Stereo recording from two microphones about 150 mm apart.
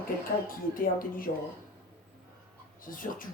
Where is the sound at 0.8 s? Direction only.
70° left (ahead or behind).